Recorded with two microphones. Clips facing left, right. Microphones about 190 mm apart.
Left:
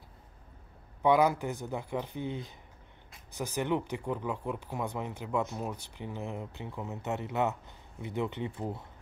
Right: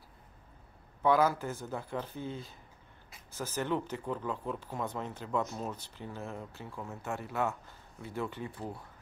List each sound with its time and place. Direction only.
1.0 s speech: 15° left (ahead or behind)